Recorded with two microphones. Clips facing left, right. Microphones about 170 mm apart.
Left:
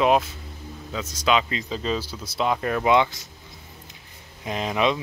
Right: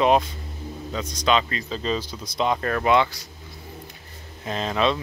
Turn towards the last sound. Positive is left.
turn(degrees=15)  # may be behind; listen again after turning